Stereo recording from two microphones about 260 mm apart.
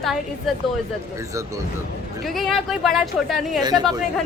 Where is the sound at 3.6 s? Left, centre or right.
Centre.